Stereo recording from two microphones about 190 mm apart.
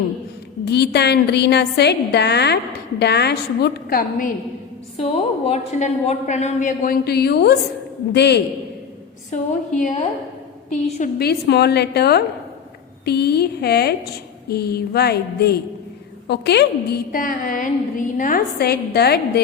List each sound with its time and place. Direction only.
0.6 s a woman's voice: 60° left (ahead or behind)
4.9 s a woman's voice: 35° left (ahead or behind); by 8.4 s 60° left (ahead or behind)
9.3 s a woman's voice: 40° left (ahead or behind)
11.2 s a woman's voice: 60° left (ahead or behind)